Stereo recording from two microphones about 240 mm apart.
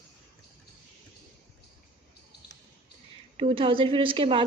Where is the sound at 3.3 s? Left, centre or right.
Right.